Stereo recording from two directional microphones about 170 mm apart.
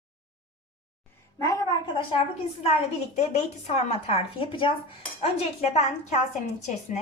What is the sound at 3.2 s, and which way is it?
Speech, 40° left (ahead or behind).